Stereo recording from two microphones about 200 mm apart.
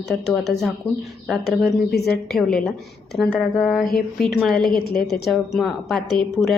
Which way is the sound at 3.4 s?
15° left (ahead or behind).